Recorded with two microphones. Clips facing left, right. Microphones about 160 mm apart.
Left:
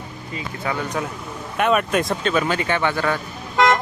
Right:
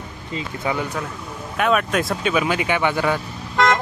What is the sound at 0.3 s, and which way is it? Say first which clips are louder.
Speech: right 2 dB; 20° right (ahead or behind).